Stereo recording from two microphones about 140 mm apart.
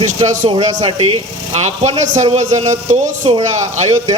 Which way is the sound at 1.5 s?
55° right (ahead or behind).